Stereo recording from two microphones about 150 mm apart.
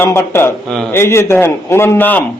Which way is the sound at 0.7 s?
5° left (ahead or behind).